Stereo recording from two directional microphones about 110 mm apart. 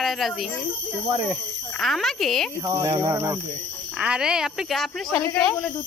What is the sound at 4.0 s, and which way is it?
A woman's voice, 10° right (ahead or behind).